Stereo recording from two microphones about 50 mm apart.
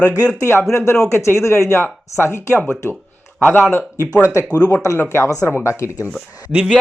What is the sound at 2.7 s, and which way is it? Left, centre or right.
Speech, left.